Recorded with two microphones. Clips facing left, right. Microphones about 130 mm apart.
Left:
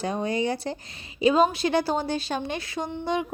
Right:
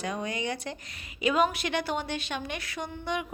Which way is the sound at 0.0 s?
30° left (ahead or behind).